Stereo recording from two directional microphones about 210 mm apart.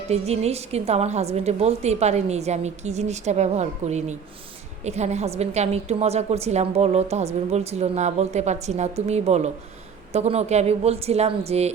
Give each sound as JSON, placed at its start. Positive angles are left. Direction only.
{"t": 0.1, "sound": "a woman's voice", "side_deg": -30}